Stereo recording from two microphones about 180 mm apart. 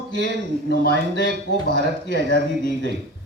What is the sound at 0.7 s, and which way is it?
Speech, 80° right.